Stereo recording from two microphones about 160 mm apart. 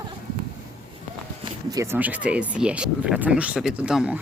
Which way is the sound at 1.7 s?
20° right (ahead or behind).